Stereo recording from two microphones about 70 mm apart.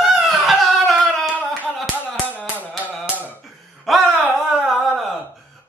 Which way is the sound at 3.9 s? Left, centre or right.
Centre.